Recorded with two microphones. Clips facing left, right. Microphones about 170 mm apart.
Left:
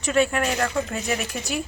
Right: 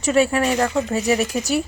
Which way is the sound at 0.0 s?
40° right (ahead or behind).